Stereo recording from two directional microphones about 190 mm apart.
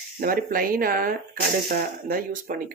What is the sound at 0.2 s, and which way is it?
Speech, 50° right (ahead or behind).